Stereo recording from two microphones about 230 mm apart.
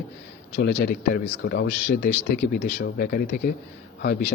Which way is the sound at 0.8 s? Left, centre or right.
Left.